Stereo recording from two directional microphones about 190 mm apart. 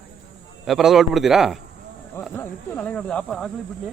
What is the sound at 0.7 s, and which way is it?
Speech, centre (ahead or behind).